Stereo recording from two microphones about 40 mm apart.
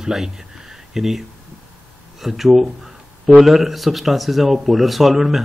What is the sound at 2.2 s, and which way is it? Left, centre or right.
Speech, centre.